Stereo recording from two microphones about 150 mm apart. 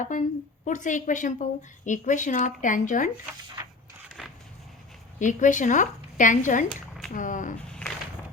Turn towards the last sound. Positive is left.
turn(degrees=5)  # may be behind; listen again after turning